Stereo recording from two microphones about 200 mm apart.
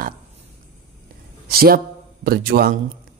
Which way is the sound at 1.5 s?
50° right (ahead or behind).